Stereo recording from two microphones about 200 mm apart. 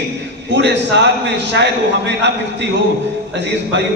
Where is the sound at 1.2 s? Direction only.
55° right (ahead or behind).